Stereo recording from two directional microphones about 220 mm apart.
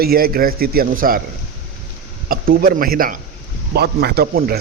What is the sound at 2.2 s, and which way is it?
A man's voice, 40° right (ahead or behind).